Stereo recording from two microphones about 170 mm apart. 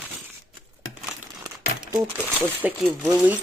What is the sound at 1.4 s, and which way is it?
Crumpling, 25° right (ahead or behind).